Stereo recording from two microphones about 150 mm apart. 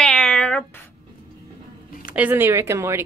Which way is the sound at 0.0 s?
5° left (ahead or behind).